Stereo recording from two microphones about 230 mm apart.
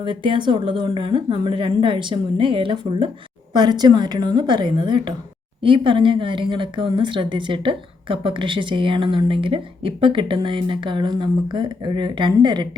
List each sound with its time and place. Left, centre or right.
0.0 s speech: right